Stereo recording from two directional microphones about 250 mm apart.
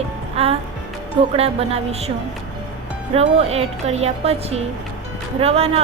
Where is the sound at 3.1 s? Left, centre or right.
Right.